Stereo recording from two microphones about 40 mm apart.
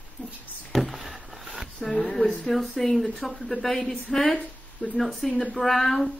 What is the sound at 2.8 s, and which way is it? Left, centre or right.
Speech, centre.